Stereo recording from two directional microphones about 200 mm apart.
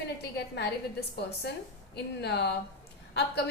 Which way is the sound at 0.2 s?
55° left (ahead or behind).